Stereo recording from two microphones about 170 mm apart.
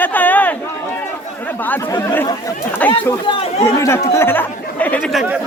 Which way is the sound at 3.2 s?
35° left (ahead or behind).